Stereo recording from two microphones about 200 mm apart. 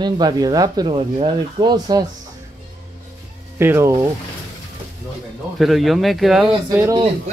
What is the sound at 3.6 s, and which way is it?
Speech, 10° right (ahead or behind).